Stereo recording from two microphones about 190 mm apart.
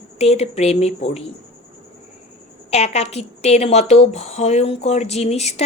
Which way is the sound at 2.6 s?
35° left (ahead or behind).